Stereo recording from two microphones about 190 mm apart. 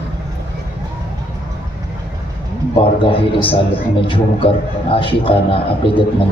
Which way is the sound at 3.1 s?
30° left (ahead or behind).